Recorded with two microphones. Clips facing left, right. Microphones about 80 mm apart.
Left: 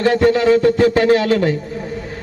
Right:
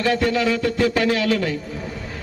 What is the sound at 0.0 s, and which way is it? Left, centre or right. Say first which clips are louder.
A man's voice: left 6 dB; left.